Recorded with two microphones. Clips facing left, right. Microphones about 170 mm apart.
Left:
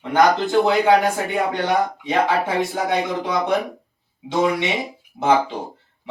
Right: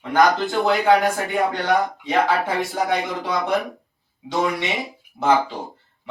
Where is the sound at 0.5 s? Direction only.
20° left (ahead or behind).